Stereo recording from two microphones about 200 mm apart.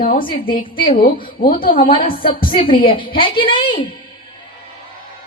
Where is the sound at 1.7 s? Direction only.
25° left (ahead or behind).